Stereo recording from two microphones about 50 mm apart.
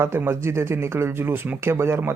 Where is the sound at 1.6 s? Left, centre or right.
Right.